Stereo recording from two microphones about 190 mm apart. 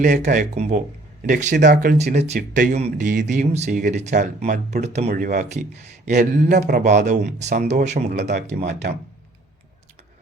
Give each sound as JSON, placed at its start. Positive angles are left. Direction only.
{"t": 0.2, "sound": "speech", "side_deg": -40}
{"t": 2.5, "sound": "speech", "side_deg": -40}
{"t": 5.0, "sound": "speech", "side_deg": -45}
{"t": 7.9, "sound": "speech", "side_deg": -60}